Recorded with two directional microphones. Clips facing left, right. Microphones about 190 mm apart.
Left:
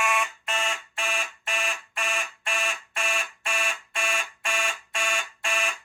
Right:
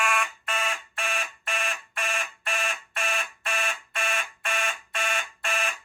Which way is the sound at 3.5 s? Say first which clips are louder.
Even; centre (ahead or behind).